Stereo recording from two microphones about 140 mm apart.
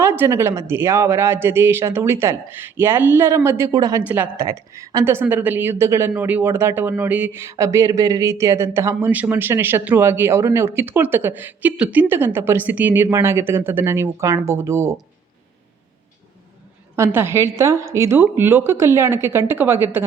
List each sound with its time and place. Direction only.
0.0 s a woman's voice: 15° right (ahead or behind)
16.9 s a woman's voice: 15° right (ahead or behind)